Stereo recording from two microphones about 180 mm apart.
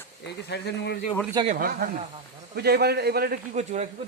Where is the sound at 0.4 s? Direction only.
70° left (ahead or behind).